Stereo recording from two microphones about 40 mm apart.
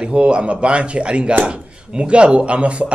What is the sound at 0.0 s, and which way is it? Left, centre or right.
Speech, right.